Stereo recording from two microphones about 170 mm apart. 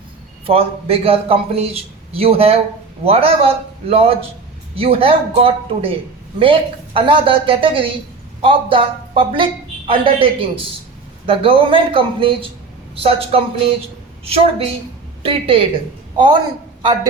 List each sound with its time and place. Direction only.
0.4 s a woman's voice: 35° right (ahead or behind)
11.3 s a woman's voice: 30° right (ahead or behind)